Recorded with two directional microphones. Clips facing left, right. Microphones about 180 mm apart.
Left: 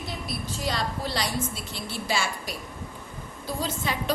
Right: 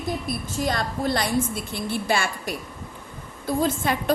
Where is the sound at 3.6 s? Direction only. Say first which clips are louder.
Right 5 dB; 50° right (ahead or behind).